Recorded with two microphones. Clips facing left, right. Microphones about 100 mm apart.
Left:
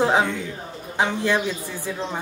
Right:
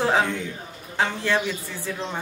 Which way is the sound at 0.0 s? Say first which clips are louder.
Left 2 dB; 20° left (ahead or behind).